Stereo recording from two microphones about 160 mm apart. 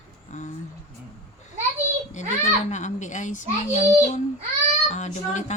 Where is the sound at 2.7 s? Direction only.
50° left (ahead or behind).